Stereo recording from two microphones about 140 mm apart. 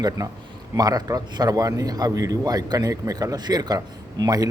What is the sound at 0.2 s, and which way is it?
Speech, 30° right (ahead or behind).